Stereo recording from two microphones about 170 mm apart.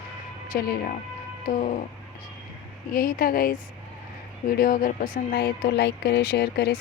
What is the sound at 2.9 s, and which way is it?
Speech, 60° left (ahead or behind).